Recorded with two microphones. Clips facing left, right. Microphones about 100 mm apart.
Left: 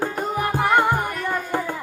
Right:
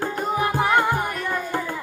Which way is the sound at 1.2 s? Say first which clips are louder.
Left 1 dB; 15° left (ahead or behind).